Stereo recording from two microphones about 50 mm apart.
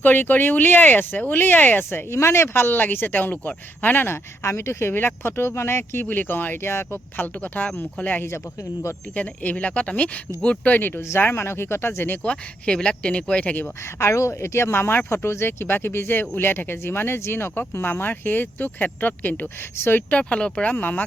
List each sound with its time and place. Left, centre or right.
0.0 s speech: left
2.0 s speech: left
4.9 s speech: left
6.1 s speech: left
7.4 s speech: left
10.8 s speech: left
11.3 s speech: left
12.2 s speech: centre
14.0 s speech: left
20.1 s speech: left
20.7 s speech: left